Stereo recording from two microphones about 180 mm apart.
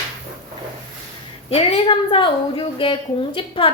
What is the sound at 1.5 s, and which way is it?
A woman's voice, 30° left (ahead or behind).